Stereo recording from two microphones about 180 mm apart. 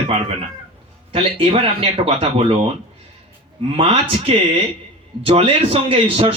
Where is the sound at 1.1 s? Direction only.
30° right (ahead or behind).